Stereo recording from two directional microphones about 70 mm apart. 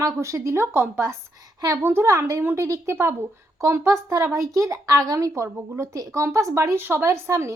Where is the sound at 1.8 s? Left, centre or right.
Right.